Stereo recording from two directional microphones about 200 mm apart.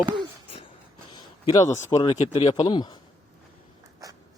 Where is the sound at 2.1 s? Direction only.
35° left (ahead or behind).